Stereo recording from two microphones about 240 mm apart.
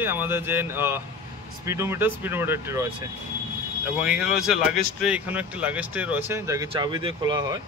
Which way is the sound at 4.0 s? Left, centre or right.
Centre.